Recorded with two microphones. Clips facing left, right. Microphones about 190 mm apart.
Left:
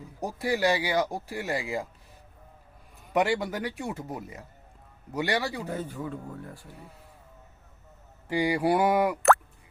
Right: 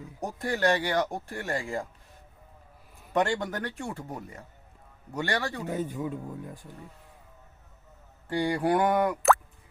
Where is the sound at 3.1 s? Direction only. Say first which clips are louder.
Left 1 dB; 5° left (ahead or behind).